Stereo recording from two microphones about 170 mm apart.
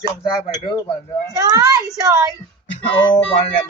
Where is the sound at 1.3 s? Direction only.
20° right (ahead or behind).